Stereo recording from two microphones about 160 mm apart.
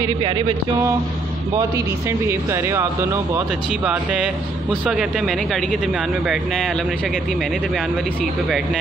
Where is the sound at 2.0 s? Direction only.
15° right (ahead or behind).